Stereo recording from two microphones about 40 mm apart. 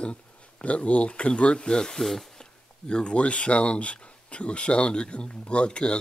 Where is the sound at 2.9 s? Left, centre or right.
Left.